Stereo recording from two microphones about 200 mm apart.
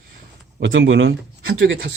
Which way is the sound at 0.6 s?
70° right (ahead or behind).